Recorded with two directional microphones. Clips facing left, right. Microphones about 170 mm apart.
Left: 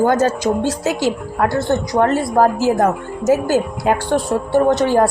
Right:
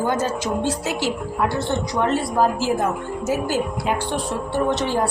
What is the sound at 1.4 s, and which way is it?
Speech, 45° left (ahead or behind).